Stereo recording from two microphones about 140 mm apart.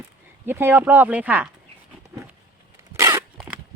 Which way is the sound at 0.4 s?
15° right (ahead or behind).